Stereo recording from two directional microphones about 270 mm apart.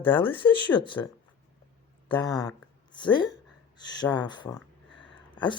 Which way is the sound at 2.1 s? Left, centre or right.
Centre.